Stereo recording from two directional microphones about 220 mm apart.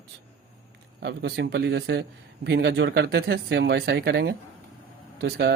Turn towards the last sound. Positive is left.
turn(degrees=-50)  # may be behind; listen again after turning